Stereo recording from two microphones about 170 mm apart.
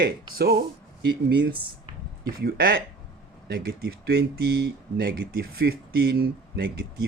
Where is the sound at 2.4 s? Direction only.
65° right (ahead or behind).